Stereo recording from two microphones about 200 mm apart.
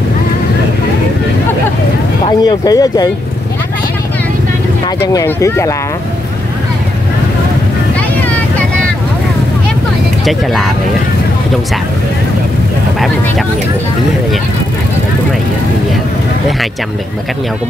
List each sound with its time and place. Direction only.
2.2 s speech: 20° left (ahead or behind)
5.0 s speech: 15° left (ahead or behind)
10.2 s speech: centre (ahead or behind)